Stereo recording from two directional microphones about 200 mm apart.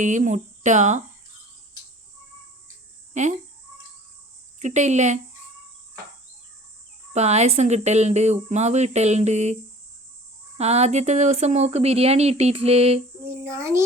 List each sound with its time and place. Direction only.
0.0 s speech: 35° right (ahead or behind)
3.1 s speech: 35° right (ahead or behind)
4.6 s speech: 35° right (ahead or behind)
7.1 s speech: 35° right (ahead or behind)
10.6 s speech: 35° right (ahead or behind)
13.4 s a child's voice: 15° right (ahead or behind)